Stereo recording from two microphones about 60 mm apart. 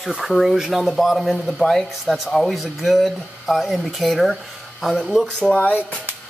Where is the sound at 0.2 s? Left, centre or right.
Centre.